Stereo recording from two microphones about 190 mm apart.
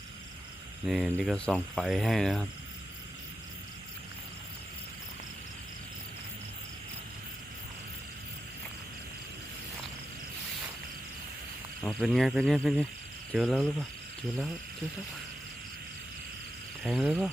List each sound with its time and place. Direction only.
0.9 s speech: 5° right (ahead or behind)
11.8 s speech: 5° left (ahead or behind)
16.8 s speech: centre (ahead or behind)